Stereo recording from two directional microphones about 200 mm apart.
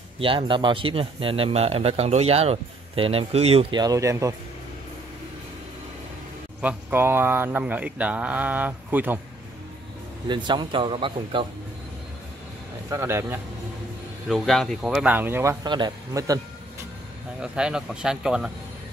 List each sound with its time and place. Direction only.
0.2 s speech: 25° right (ahead or behind)
6.6 s speech: 10° right (ahead or behind)
10.2 s speech: 25° right (ahead or behind)
12.9 s speech: 10° right (ahead or behind)
14.3 s speech: centre (ahead or behind)
15.6 s speech: 20° right (ahead or behind)
17.4 s speech: 5° right (ahead or behind)